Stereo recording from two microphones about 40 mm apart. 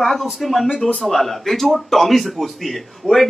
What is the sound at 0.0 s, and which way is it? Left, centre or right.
A man's voice, centre.